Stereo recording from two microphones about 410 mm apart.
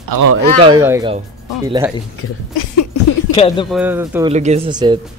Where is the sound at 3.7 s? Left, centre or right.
Centre.